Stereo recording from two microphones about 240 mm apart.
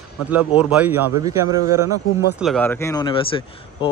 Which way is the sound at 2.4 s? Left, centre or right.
Centre.